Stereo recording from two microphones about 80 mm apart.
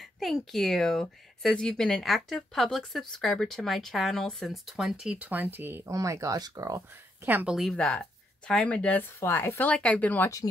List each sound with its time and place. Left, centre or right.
0.0 s speech: centre
5.2 s speech: right
5.9 s speech: right
7.4 s speech: centre
7.7 s speech: centre
9.2 s speech: left